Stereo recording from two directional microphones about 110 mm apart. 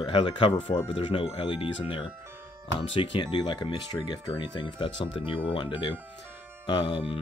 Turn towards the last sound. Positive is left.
turn(degrees=50)  # may be behind; listen again after turning